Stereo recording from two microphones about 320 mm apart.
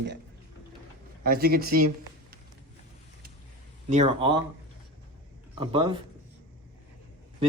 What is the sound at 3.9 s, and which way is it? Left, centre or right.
Speech, centre.